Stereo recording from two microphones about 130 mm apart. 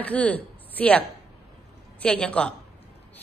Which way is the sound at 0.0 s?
10° left (ahead or behind).